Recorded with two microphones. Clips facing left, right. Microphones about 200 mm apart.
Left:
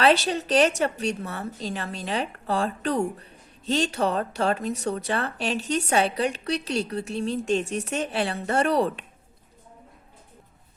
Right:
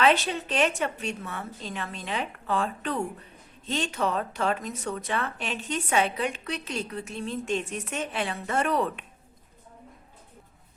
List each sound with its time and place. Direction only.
0.0 s a woman's voice: 35° left (ahead or behind)